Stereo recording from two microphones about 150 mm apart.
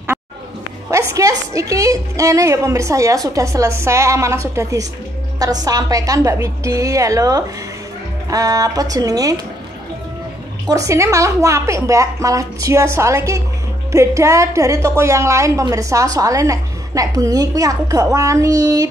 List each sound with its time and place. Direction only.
0.8 s a woman's voice: 20° right (ahead or behind)
10.7 s a woman's voice: 20° right (ahead or behind)